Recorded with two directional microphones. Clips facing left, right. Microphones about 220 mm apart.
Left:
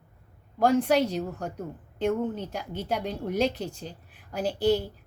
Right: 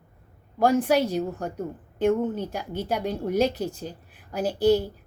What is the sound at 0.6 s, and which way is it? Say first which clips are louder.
A woman's voice: right 1 dB; 5° right (ahead or behind).